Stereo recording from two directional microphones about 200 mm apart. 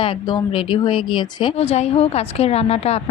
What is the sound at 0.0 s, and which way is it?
Speech, 25° left (ahead or behind).